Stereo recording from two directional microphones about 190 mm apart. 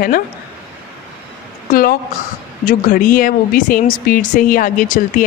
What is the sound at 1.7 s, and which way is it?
Speech, 50° left (ahead or behind).